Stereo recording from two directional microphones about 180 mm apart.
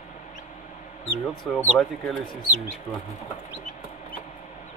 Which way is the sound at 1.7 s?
Centre (ahead or behind).